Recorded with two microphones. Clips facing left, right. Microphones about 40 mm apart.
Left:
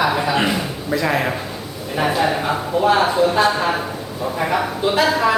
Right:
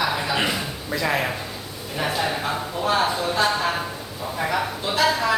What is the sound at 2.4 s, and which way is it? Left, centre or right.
A man's voice, left.